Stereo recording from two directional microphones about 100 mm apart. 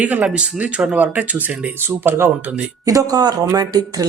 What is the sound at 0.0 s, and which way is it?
Speech, 15° right (ahead or behind).